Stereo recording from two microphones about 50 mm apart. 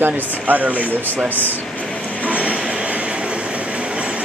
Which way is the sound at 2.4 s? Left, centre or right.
Right.